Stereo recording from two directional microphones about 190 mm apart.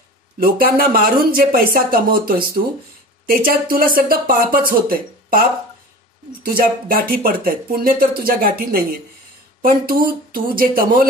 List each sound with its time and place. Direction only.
0.4 s speech: 50° right (ahead or behind)
6.4 s speech: 50° right (ahead or behind)